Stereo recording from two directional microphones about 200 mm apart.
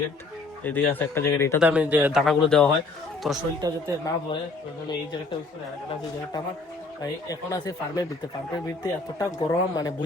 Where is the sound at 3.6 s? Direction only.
20° right (ahead or behind).